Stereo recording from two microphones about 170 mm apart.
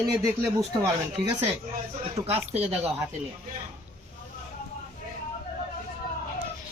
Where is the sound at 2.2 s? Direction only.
20° right (ahead or behind).